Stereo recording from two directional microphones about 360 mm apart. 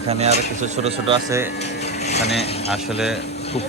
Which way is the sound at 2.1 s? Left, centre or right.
Centre.